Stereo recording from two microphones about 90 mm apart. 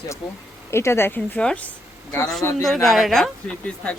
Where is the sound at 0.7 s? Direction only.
30° left (ahead or behind).